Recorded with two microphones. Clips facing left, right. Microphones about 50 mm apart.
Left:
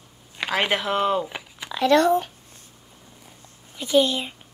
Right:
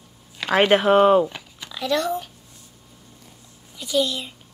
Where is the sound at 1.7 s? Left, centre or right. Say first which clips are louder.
Left 6 dB; left.